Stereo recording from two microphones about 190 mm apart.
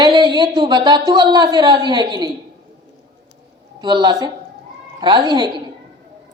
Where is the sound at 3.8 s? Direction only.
25° right (ahead or behind).